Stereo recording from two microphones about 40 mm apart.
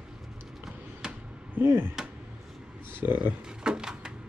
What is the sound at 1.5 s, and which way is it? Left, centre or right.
Speech, right.